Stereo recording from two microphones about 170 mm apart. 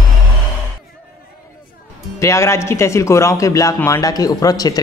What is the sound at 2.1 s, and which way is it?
Speech, 15° left (ahead or behind).